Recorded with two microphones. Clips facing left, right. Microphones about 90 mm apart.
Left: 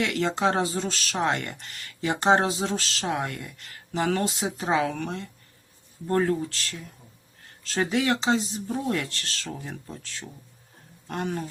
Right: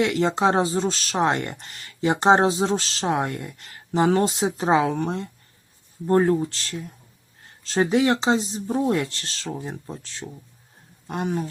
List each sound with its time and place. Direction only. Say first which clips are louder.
0.0 s speech: right 4 dB; 25° right (ahead or behind)
11.1 s speech: right 4 dB; 15° right (ahead or behind)